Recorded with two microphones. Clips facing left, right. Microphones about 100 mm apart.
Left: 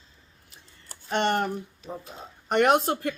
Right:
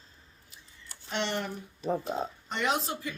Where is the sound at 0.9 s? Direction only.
55° left (ahead or behind).